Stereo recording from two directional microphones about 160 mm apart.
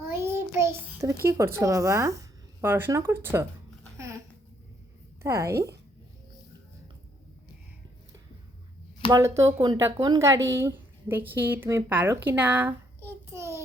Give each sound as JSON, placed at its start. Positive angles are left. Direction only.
{"t": 0.1, "sound": "child singing", "side_deg": -15}
{"t": 1.2, "sound": "a woman's voice", "side_deg": -15}
{"t": 3.9, "sound": "babbling", "side_deg": -20}
{"t": 5.2, "sound": "a woman's voice", "side_deg": -15}
{"t": 9.0, "sound": "speech", "side_deg": -20}